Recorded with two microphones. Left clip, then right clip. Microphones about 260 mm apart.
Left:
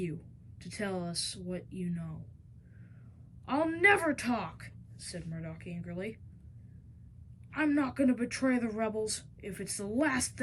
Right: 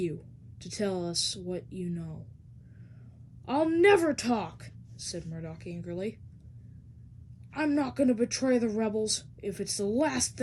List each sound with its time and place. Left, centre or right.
0.6 s speech: centre
3.4 s speech: centre
7.5 s speech: centre